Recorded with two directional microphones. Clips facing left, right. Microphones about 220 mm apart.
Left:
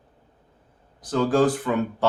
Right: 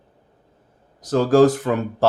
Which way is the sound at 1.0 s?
40° right (ahead or behind).